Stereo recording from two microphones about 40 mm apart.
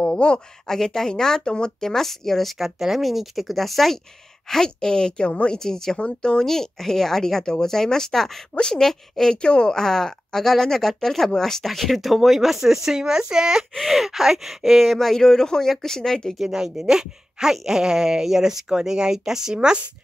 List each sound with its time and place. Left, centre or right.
0.0 s speech: left
0.7 s speech: centre
2.5 s a woman's voice: centre; by 5.6 s left
5.6 s speech: centre
5.9 s a woman's voice: left
6.4 s speech: centre
9.4 s speech: left; by 13.7 s centre
13.7 s speech: centre
16.3 s speech: centre
19.5 s speech: right